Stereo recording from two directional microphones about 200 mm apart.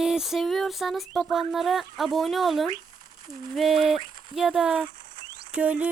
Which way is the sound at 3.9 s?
25° right (ahead or behind).